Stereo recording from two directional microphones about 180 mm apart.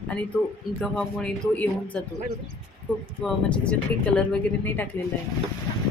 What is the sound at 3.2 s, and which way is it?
Speech, 5° left (ahead or behind).